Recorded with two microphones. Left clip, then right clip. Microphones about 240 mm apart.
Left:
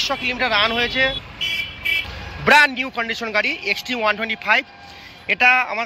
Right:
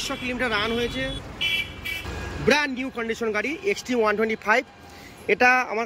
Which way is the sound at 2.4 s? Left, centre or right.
Centre.